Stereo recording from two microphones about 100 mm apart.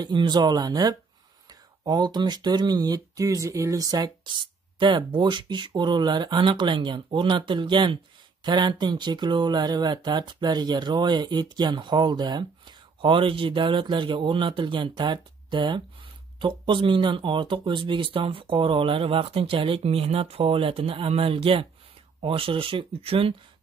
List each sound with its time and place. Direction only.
0.0 s speech: 50° right (ahead or behind); by 23.3 s 70° right (ahead or behind)